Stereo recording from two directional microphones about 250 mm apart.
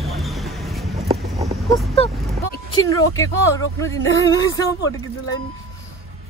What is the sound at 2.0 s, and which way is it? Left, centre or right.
Speech, left.